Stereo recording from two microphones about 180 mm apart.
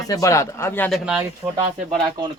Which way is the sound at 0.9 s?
5° right (ahead or behind).